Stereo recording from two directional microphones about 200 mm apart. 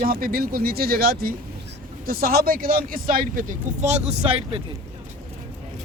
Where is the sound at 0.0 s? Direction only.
45° right (ahead or behind); by 4.6 s 30° right (ahead or behind).